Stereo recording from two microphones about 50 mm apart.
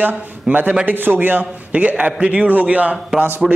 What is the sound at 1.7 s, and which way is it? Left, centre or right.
A man's voice, right.